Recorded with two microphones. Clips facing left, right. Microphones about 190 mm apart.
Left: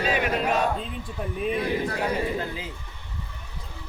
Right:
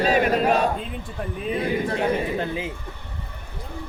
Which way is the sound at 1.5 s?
25° right (ahead or behind).